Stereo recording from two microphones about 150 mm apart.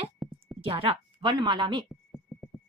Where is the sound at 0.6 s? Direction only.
35° right (ahead or behind).